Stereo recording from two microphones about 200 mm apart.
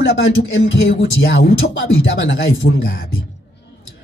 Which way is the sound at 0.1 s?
70° left (ahead or behind).